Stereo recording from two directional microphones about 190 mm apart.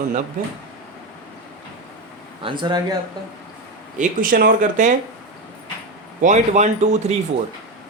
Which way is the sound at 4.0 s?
45° right (ahead or behind).